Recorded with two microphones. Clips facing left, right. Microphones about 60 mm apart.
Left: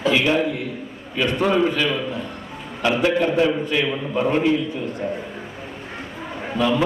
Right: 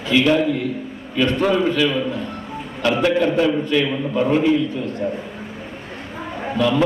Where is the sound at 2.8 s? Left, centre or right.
Centre.